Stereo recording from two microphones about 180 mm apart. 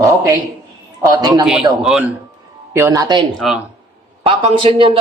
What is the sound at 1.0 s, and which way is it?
Speech, 20° right (ahead or behind).